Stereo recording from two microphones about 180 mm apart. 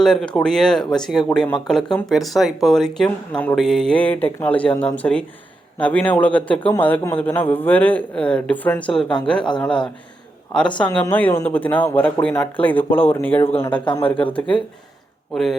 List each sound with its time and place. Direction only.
0.0 s a man's voice: 5° left (ahead or behind)
14.0 s speech: 30° left (ahead or behind)
14.3 s a man's voice: 5° left (ahead or behind)